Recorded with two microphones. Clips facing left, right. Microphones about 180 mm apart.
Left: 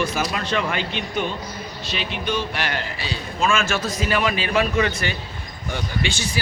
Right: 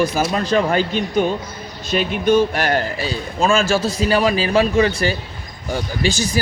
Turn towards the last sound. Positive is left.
turn(degrees=-40)  # may be behind; listen again after turning